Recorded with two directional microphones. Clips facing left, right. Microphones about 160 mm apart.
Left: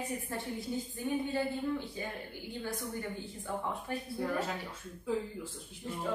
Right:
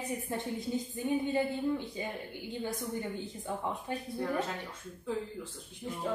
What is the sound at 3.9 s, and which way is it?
Speech, 20° right (ahead or behind).